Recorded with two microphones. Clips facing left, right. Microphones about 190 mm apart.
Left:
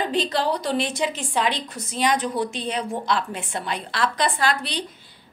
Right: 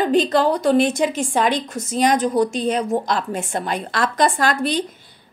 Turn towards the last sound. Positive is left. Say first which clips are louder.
# right 5 dB
turn(degrees=-45)  # may be behind; listen again after turning